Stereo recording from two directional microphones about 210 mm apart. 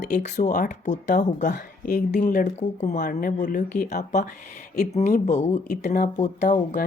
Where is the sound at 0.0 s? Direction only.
35° left (ahead or behind).